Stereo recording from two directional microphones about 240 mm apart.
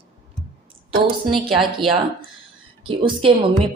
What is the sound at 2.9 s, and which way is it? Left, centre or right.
Speech, right.